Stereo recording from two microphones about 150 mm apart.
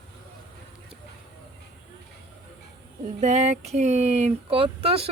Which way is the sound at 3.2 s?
50° right (ahead or behind).